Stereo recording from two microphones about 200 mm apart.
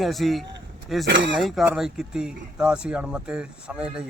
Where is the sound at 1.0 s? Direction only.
65° right (ahead or behind).